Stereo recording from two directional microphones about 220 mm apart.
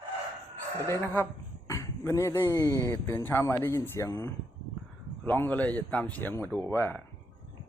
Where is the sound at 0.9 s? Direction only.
10° left (ahead or behind).